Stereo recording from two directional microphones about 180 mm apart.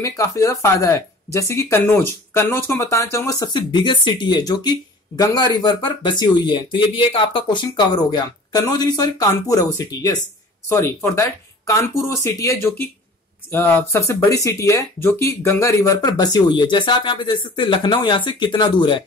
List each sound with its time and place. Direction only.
0.0 s speech: 20° left (ahead or behind)